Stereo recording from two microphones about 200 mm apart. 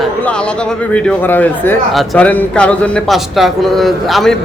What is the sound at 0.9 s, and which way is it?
Speech, 10° left (ahead or behind).